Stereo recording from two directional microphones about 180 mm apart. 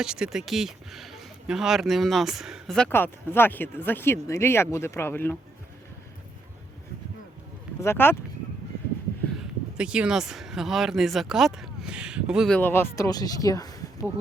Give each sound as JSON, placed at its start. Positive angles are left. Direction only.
{"t": 0.0, "sound": "speech", "side_deg": -5}
{"t": 7.8, "sound": "speech", "side_deg": 15}
{"t": 9.7, "sound": "speech", "side_deg": -5}
{"t": 12.5, "sound": "speech", "side_deg": 10}